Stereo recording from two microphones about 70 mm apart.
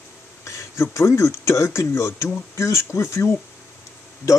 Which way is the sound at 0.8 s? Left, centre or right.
Left.